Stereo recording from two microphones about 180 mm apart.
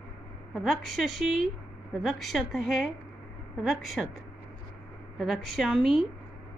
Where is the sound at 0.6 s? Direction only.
Centre (ahead or behind).